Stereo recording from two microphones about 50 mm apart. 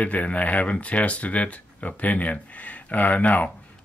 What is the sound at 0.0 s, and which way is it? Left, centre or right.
Speech, left.